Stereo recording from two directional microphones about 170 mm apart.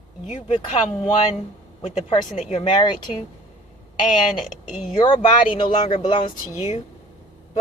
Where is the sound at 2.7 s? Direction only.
25° left (ahead or behind).